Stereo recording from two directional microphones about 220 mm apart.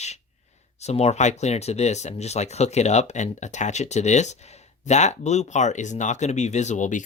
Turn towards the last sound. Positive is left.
turn(degrees=35)  # may be behind; listen again after turning